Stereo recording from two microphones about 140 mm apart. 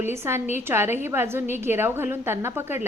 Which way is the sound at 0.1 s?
15° right (ahead or behind).